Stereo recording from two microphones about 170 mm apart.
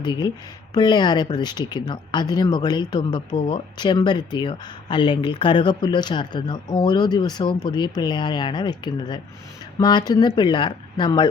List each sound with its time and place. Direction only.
0.0 s speech: 25° left (ahead or behind)